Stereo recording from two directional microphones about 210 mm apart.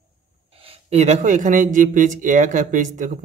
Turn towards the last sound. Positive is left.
turn(degrees=-35)  # may be behind; listen again after turning